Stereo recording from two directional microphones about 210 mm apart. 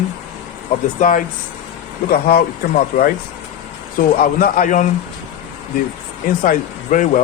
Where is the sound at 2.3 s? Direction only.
40° left (ahead or behind).